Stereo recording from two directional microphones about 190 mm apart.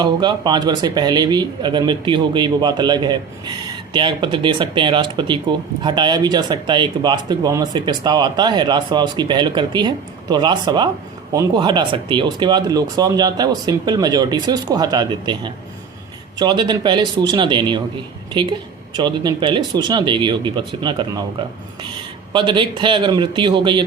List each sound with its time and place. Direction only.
0.0 s speech: 20° right (ahead or behind)
22.3 s speech: 25° right (ahead or behind)